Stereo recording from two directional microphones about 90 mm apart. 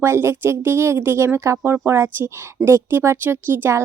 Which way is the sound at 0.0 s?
30° right (ahead or behind).